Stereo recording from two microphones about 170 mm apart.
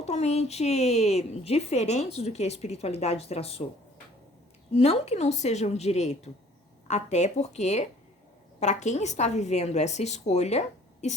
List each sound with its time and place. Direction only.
0.0 s a woman's voice: 40° left (ahead or behind)
4.7 s a woman's voice: 35° left (ahead or behind)